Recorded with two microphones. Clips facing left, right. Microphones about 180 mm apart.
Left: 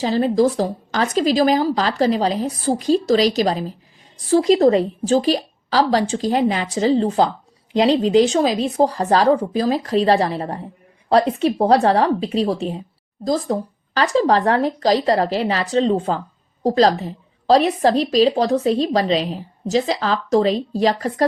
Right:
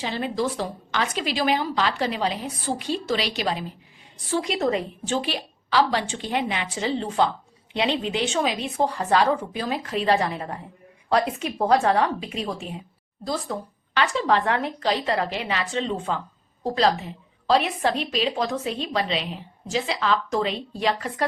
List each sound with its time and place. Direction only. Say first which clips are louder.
0.0 s a woman's voice: left 10 dB; 40° left (ahead or behind)